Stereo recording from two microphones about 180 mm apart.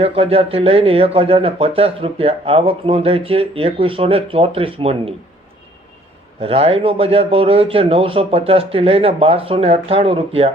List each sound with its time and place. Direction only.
0.0 s a man's voice: 30° right (ahead or behind)
6.4 s a man's voice: 30° right (ahead or behind)